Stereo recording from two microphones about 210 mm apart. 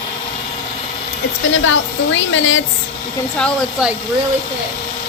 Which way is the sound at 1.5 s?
65° left (ahead or behind).